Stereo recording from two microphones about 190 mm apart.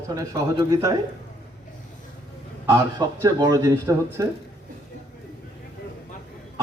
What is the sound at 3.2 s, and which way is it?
Speech, 15° right (ahead or behind).